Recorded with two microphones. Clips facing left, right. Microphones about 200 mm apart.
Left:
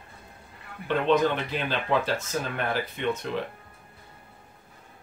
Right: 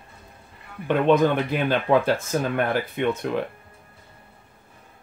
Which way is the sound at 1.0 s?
50° right (ahead or behind).